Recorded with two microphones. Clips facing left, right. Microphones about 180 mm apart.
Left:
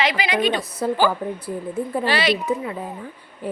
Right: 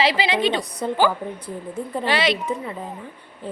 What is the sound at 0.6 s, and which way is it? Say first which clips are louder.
A woman's voice: left 1 dB; 5° left (ahead or behind).